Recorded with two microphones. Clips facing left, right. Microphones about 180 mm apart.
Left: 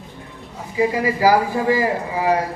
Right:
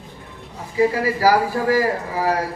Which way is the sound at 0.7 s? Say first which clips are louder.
Right 1 dB; 15° left (ahead or behind).